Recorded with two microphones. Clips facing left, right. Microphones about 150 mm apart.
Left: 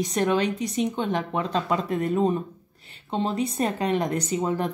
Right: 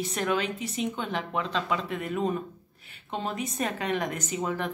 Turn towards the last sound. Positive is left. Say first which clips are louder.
# left 5 dB
turn(degrees=30)  # may be behind; listen again after turning